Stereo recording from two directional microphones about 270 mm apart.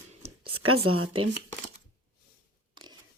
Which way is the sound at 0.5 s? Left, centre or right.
Right.